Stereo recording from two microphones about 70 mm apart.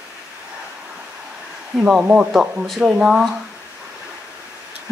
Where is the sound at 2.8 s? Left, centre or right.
Centre.